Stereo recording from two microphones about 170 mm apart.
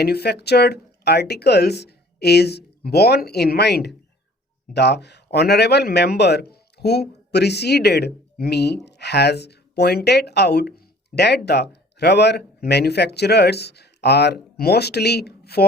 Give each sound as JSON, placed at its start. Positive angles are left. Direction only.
{"t": 0.0, "sound": "a man's voice", "side_deg": 70}